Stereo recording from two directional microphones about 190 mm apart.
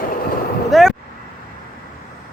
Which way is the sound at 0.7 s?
Centre (ahead or behind).